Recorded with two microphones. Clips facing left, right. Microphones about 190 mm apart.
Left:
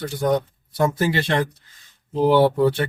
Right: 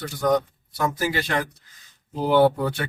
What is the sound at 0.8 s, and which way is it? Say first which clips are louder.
Speech: left 4 dB; 30° left (ahead or behind).